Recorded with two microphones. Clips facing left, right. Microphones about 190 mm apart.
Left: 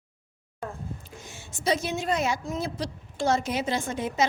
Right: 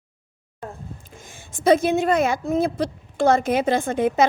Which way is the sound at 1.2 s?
50° right (ahead or behind).